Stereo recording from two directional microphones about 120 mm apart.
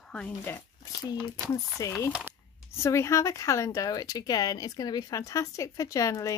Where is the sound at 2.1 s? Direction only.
10° right (ahead or behind).